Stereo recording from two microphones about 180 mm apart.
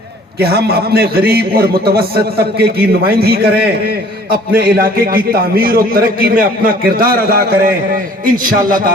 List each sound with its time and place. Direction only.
0.3 s a man's voice: 60° right (ahead or behind)